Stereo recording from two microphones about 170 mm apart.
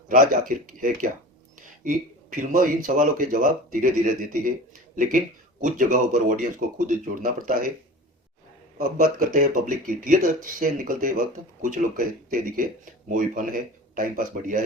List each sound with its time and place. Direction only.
0.1 s speech: 50° right (ahead or behind)
8.8 s speech: 50° right (ahead or behind)